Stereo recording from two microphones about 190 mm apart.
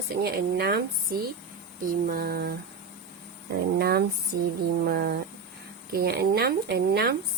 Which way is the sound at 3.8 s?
55° right (ahead or behind).